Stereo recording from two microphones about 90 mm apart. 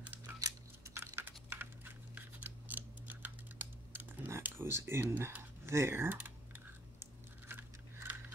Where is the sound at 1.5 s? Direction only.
25° right (ahead or behind).